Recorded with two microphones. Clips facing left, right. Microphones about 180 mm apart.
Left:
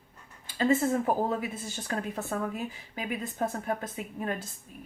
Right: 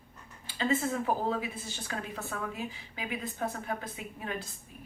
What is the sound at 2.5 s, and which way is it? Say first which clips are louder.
A woman's voice: left 3 dB; 45° left (ahead or behind).